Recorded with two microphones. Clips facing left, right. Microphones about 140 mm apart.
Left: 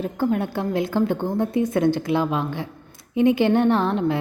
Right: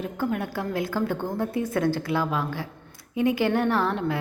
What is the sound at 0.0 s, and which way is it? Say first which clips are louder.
A woman's voice: left 5 dB; 30° left (ahead or behind).